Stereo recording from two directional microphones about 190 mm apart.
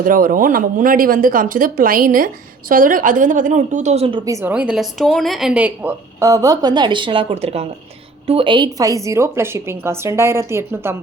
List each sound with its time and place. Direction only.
0.0 s speech: 45° right (ahead or behind)
4.3 s speech: 15° right (ahead or behind)
4.5 s speech: 5° right (ahead or behind)